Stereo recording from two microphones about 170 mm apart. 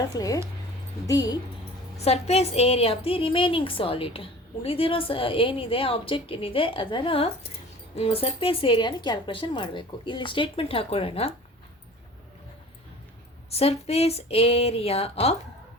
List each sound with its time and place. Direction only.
0.1 s speech: 20° left (ahead or behind)
2.0 s a woman's voice: 40° left (ahead or behind)
13.5 s a woman's voice: 35° left (ahead or behind)